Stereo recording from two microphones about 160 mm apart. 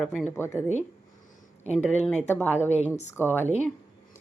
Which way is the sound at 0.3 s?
15° left (ahead or behind).